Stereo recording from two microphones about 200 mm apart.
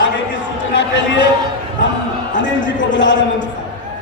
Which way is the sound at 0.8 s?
60° left (ahead or behind).